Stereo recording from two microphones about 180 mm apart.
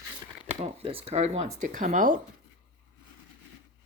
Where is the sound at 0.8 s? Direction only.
30° right (ahead or behind).